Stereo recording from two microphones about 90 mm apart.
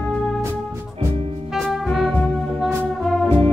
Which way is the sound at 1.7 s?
Centre (ahead or behind).